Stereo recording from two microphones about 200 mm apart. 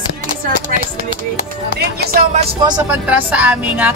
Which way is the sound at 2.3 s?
25° right (ahead or behind).